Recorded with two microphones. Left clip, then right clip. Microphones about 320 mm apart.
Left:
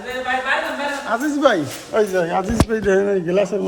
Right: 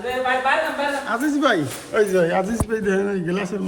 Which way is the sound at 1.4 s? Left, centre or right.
Centre.